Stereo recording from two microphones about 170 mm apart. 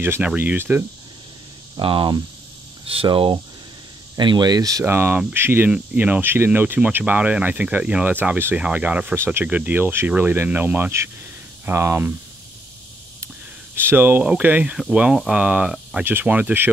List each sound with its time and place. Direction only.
0.0 s speech: 10° right (ahead or behind)
1.8 s speech: 30° right (ahead or behind); by 12.1 s 15° right (ahead or behind)
13.7 s speech: 10° right (ahead or behind)